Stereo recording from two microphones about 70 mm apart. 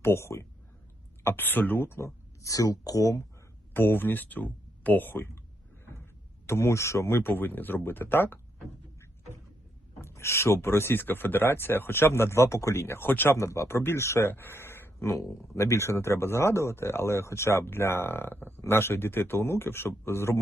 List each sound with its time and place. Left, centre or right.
0.0 s speech: left
3.8 s speech: left
6.5 s speech: left
10.0 s speech: left
13.3 s speech: left